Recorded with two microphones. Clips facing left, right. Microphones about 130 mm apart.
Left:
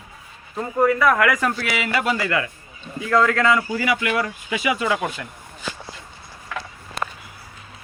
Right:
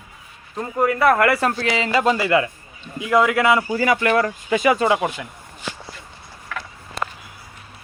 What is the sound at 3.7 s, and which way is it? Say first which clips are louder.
Speech: right 4 dB; 40° right (ahead or behind).